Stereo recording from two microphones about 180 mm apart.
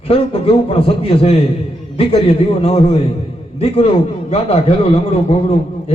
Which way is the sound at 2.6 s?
35° left (ahead or behind).